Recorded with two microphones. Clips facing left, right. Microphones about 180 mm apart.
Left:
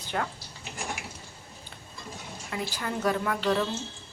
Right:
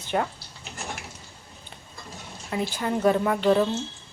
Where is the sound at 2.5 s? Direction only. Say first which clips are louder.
Right 6 dB; 25° right (ahead or behind).